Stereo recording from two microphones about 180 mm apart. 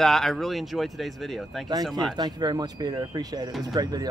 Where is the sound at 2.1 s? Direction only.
25° right (ahead or behind).